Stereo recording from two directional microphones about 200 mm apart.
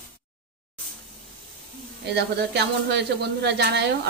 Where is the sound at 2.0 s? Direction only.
55° right (ahead or behind).